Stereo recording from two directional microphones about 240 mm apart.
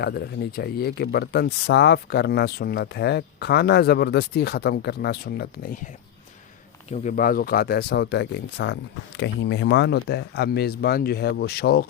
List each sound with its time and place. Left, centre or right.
0.0 s speech: left
6.9 s speech: left